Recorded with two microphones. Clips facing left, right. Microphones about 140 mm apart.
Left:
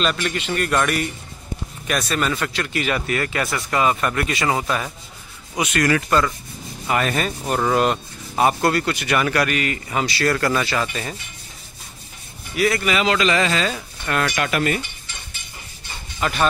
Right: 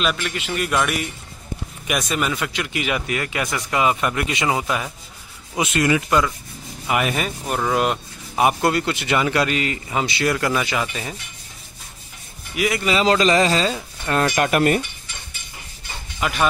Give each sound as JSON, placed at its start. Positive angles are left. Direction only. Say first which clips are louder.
{"t": 0.0, "sound": "a man's voice", "louder": "left 1 dB", "side_deg": -5}
{"t": 5.6, "sound": "speech", "louder": "even", "side_deg": -25}
{"t": 12.5, "sound": "speech", "louder": "left 2 dB", "side_deg": -15}
{"t": 12.8, "sound": "a man's voice", "louder": "right 2 dB", "side_deg": -30}
{"t": 14.4, "sound": "speech", "louder": "right 4 dB", "side_deg": -45}
{"t": 16.2, "sound": "speech", "louder": "even", "side_deg": -5}